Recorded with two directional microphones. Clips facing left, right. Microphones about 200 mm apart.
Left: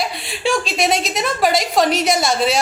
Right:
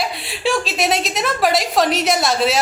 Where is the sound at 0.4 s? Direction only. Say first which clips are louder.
Left 1 dB; centre (ahead or behind).